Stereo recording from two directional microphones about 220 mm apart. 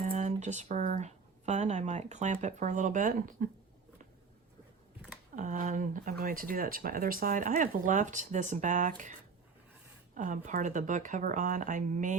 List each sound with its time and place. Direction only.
0.0 s speech: 30° right (ahead or behind)
5.4 s speech: 35° right (ahead or behind)
10.2 s speech: 35° right (ahead or behind)